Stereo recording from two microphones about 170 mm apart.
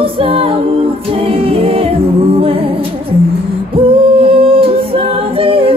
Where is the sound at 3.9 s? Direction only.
30° right (ahead or behind).